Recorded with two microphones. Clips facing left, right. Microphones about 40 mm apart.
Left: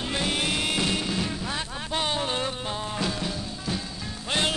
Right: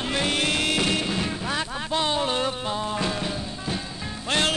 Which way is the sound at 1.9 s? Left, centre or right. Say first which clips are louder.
Right 3 dB; centre.